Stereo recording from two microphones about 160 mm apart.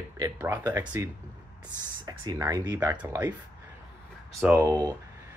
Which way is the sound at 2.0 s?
25° right (ahead or behind).